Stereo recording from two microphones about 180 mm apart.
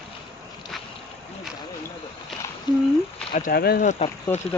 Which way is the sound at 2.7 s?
25° left (ahead or behind).